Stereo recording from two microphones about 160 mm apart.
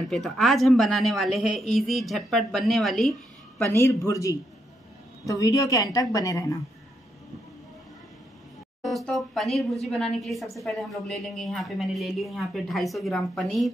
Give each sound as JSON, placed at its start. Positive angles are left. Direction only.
{"t": 0.1, "sound": "a woman's voice", "side_deg": 0}
{"t": 3.5, "sound": "a woman's voice", "side_deg": 15}
{"t": 8.8, "sound": "a woman's voice", "side_deg": 0}